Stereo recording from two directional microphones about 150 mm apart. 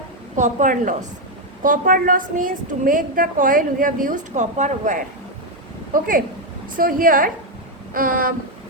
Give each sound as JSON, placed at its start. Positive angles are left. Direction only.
{"t": 0.3, "sound": "a woman's voice", "side_deg": -55}
{"t": 5.9, "sound": "a woman's voice", "side_deg": -65}